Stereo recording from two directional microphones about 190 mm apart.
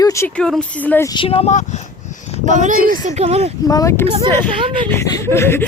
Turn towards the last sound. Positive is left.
turn(degrees=15)  # may be behind; listen again after turning